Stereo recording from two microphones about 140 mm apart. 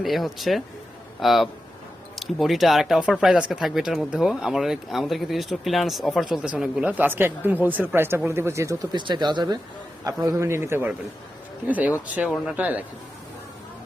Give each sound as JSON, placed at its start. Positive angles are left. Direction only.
{"t": 0.0, "sound": "a man's voice", "side_deg": 0}